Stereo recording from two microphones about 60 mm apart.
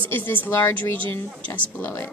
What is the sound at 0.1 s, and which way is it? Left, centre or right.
Speech, left.